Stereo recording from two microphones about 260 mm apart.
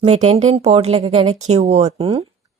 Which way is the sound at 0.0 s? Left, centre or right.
Right.